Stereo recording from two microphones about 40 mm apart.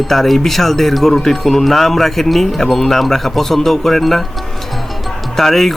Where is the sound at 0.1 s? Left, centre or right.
Centre.